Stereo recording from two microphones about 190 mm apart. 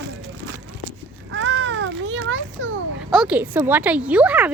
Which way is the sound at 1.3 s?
70° right (ahead or behind).